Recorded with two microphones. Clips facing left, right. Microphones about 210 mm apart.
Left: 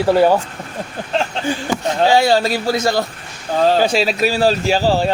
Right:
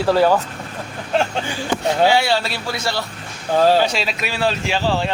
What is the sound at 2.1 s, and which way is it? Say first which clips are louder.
A man's voice: left 4 dB; 40° left (ahead or behind).